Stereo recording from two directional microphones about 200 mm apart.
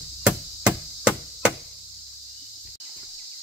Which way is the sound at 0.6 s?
5° right (ahead or behind).